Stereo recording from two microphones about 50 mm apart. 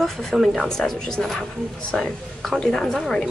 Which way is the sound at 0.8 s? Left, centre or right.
Centre.